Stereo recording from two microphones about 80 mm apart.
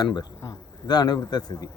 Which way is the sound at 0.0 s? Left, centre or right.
Left.